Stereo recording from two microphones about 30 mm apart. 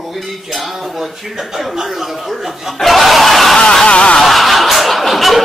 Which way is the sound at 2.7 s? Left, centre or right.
Centre.